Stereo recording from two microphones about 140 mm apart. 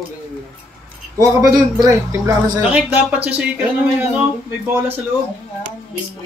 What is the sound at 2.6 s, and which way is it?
Speech, 10° right (ahead or behind).